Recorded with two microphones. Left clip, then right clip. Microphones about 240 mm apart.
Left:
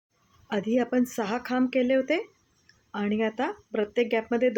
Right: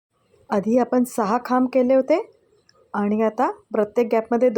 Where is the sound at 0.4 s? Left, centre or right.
Centre.